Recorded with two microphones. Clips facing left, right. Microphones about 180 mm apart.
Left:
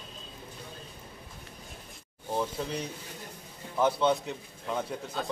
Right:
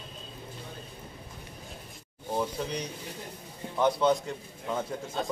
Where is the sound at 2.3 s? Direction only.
5° left (ahead or behind).